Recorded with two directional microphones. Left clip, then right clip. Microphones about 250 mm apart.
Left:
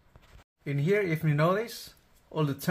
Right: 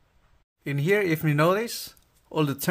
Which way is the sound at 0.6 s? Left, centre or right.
Right.